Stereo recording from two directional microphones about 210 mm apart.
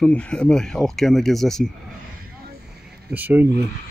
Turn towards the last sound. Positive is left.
turn(degrees=-10)  # may be behind; listen again after turning